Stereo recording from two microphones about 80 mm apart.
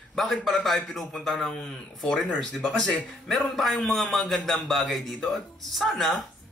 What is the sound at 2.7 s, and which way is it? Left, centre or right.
A man's voice, centre.